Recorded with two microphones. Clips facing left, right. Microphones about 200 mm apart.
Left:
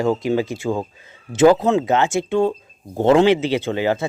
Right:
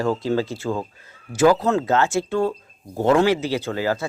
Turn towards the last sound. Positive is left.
turn(degrees=20)  # may be behind; listen again after turning